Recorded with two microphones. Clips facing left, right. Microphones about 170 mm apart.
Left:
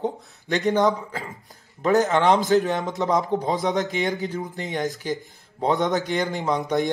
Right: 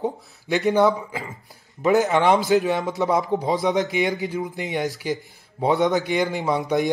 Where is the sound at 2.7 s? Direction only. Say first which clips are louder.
Right 2 dB; centre (ahead or behind).